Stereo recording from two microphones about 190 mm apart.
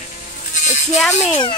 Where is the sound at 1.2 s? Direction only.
25° left (ahead or behind).